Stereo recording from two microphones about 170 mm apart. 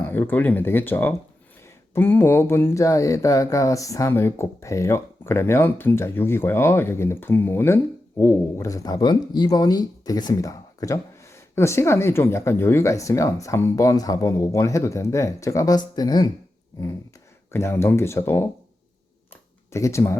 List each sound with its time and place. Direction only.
0.0 s speech: 10° left (ahead or behind)
17.5 s speech: 15° left (ahead or behind)
19.3 s a sound: 15° left (ahead or behind)